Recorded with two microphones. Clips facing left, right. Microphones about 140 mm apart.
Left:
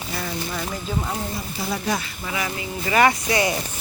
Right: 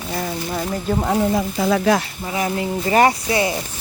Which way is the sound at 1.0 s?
80° right.